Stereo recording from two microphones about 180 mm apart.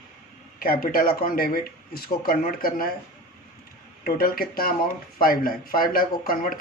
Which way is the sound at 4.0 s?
55° left (ahead or behind).